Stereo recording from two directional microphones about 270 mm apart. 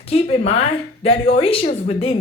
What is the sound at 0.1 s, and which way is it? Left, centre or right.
A woman's voice, left.